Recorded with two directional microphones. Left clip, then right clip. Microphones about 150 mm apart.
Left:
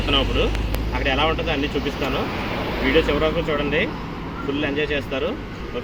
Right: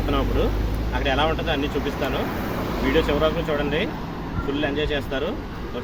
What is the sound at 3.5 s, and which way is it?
Speech, 5° right (ahead or behind).